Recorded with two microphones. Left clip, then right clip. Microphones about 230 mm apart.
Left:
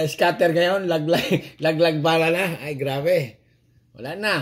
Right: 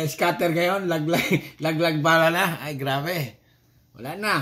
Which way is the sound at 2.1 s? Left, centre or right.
Centre.